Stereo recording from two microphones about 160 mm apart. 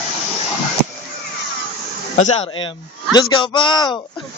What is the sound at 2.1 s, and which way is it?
Speech, 45° left (ahead or behind).